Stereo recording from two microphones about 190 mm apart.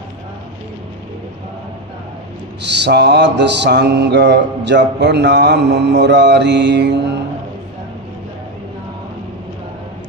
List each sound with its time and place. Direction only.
2.6 s mantra: 65° right (ahead or behind)